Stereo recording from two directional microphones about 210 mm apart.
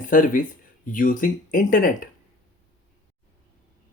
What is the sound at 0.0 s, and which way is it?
Speech, 40° left (ahead or behind).